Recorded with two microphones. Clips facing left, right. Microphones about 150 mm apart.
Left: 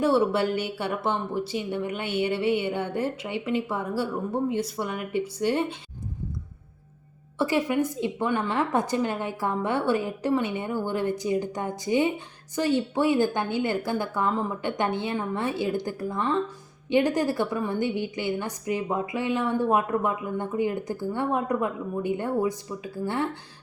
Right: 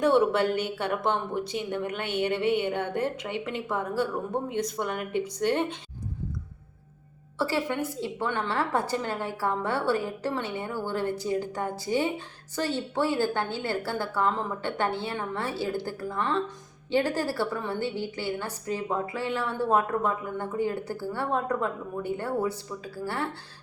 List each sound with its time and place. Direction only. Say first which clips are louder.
0.0 s a woman's voice: even; 5° left (ahead or behind)
7.3 s a woman's voice: left 4 dB; 15° left (ahead or behind)